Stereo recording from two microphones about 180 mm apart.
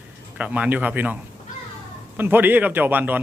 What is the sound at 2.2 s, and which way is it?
Speech, 10° right (ahead or behind).